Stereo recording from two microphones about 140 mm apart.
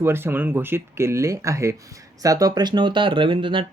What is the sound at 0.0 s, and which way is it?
Speech, 15° right (ahead or behind).